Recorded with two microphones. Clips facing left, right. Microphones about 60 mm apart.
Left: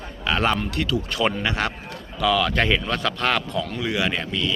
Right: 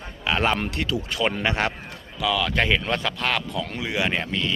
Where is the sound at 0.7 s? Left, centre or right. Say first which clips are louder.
Left 2 dB; right.